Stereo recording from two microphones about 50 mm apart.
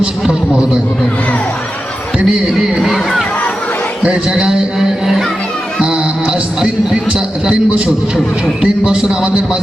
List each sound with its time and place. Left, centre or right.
0.0 s a man's voice: centre
2.1 s a man's voice: centre
2.8 s speech: centre
4.0 s a man's voice: centre
5.8 s speech: centre
8.6 s a man's voice: centre